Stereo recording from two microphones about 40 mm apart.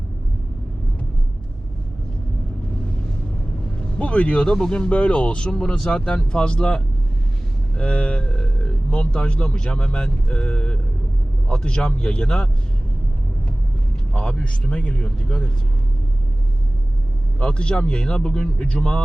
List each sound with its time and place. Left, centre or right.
3.8 s speech: left
14.1 s speech: left
17.4 s speech: left